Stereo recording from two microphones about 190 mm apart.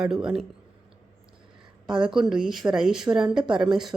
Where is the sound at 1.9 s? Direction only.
5° right (ahead or behind).